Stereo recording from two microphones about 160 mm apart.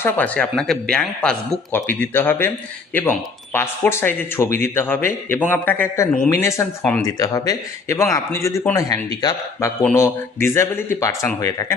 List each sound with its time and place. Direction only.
0.0 s speech: 10° left (ahead or behind)